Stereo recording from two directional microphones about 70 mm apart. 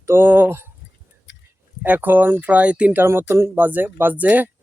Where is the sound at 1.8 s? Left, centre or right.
Right.